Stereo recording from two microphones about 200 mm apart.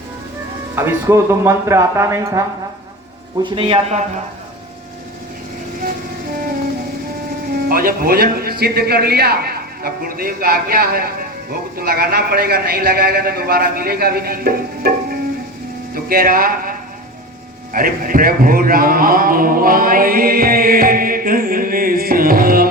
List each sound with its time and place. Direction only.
0.8 s speech: 15° right (ahead or behind)
3.4 s a man's voice: 25° right (ahead or behind)
7.7 s a man's voice: 45° right (ahead or behind)